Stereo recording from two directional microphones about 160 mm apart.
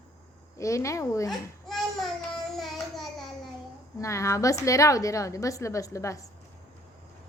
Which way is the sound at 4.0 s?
20° left (ahead or behind).